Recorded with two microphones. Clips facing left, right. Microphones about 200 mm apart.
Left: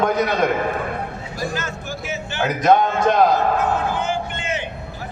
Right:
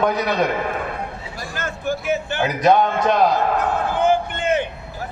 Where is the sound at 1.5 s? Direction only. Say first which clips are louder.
Right 3 dB; 55° right (ahead or behind).